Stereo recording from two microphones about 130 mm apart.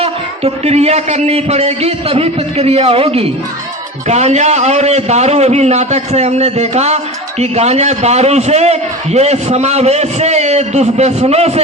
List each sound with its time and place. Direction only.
0.0 s a man's voice: 55° right (ahead or behind)